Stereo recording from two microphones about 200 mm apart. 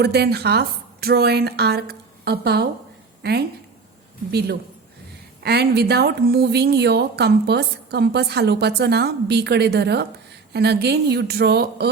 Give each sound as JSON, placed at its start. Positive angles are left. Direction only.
{"t": 0.0, "sound": "speech", "side_deg": -55}
{"t": 4.3, "sound": "speech", "side_deg": -55}